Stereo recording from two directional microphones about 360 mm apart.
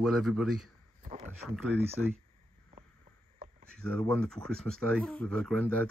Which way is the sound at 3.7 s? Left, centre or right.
Centre.